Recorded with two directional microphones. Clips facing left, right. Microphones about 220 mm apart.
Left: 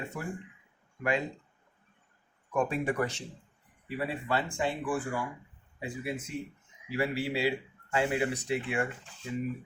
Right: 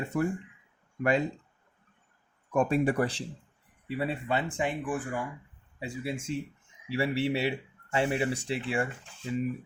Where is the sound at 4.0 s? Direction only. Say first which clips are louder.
Right 1 dB; 20° right (ahead or behind).